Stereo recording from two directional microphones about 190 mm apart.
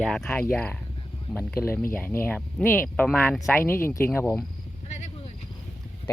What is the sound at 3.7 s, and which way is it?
Speech, 15° left (ahead or behind).